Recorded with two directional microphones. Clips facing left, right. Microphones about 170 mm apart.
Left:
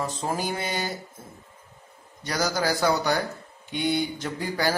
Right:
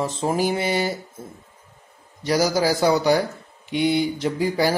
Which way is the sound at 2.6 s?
25° right (ahead or behind).